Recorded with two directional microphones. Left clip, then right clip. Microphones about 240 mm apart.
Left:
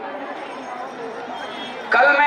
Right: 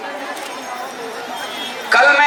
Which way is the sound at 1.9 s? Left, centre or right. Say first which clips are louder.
Right 3 dB; centre.